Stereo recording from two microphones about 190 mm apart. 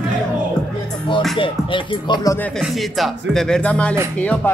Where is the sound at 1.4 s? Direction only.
25° left (ahead or behind).